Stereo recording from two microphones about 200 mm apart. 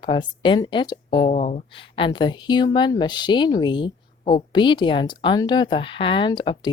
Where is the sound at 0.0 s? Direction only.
25° left (ahead or behind).